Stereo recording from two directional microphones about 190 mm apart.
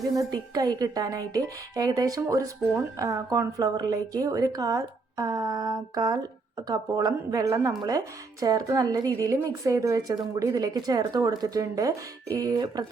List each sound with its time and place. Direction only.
0.2 s a woman's voice: 20° right (ahead or behind)